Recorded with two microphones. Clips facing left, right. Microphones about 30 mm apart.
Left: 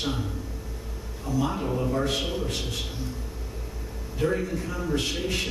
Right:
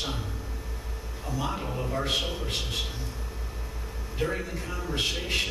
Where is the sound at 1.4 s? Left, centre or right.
Centre.